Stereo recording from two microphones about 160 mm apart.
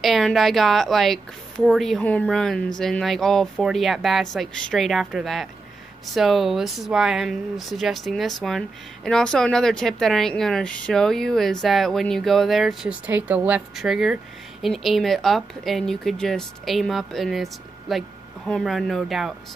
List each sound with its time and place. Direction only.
0.0 s speech: centre (ahead or behind)